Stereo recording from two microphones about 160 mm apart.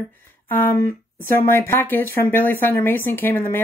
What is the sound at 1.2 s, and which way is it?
Speech, 15° left (ahead or behind).